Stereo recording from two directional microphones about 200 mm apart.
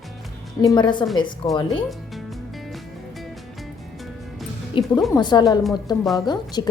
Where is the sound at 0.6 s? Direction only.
20° left (ahead or behind).